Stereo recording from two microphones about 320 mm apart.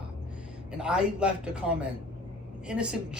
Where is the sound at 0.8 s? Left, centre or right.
Centre.